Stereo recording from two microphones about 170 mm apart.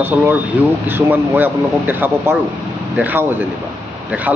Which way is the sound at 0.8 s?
10° right (ahead or behind).